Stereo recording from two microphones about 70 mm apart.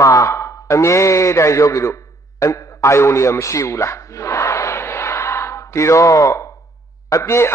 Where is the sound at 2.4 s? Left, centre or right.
Left.